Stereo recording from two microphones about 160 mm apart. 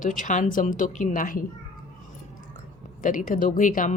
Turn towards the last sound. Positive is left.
turn(degrees=55)  # may be behind; listen again after turning